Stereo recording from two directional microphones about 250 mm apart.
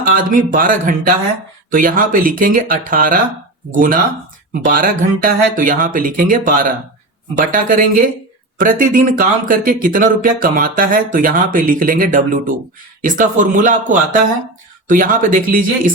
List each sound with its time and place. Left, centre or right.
0.0 s speech: right